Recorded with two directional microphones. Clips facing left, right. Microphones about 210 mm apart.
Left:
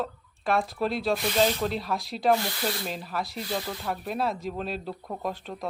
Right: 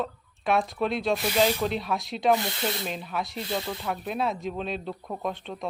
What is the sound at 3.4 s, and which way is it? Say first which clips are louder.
Speech: right 1 dB; 25° right (ahead or behind).